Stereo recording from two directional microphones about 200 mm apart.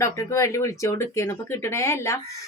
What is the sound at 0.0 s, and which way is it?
A woman's voice, 15° left (ahead or behind).